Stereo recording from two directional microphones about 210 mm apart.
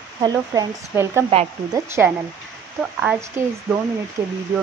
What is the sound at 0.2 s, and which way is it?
Speech, 15° right (ahead or behind).